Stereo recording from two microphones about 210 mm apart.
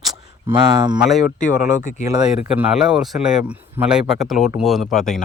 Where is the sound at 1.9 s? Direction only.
40° left (ahead or behind).